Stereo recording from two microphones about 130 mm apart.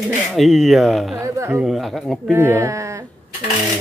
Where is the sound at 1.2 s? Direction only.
25° right (ahead or behind).